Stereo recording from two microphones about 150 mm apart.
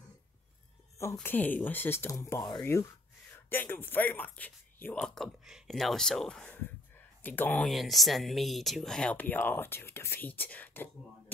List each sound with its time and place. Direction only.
1.2 s speech: 10° left (ahead or behind)
7.6 s speech: centre (ahead or behind)